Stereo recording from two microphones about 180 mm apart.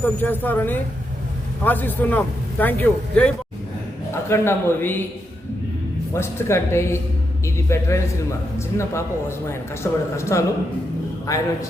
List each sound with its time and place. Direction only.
0.0 s a man's voice: 10° left (ahead or behind)
6.1 s a man's voice: 15° left (ahead or behind)